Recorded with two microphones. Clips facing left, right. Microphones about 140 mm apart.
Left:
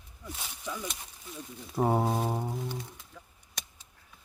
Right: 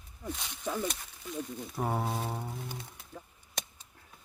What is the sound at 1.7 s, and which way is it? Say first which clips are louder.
Mantra: left 6 dB; 25° left (ahead or behind).